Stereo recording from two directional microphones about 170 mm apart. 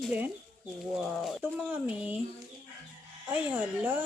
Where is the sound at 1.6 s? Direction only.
10° right (ahead or behind).